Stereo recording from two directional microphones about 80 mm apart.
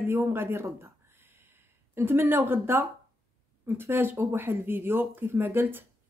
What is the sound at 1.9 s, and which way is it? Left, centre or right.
A woman's voice, right.